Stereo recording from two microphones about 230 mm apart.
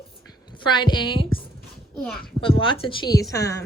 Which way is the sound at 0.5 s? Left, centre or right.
Centre.